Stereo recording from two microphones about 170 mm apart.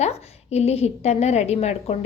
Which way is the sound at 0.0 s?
40° left (ahead or behind).